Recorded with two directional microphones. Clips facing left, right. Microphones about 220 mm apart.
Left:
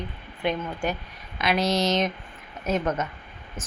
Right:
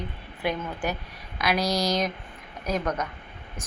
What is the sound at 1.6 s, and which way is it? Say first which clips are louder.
Speech: left 3 dB; 25° left (ahead or behind).